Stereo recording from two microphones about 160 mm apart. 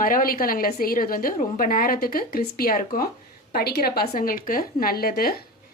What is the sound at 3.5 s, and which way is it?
A woman's voice, 80° left.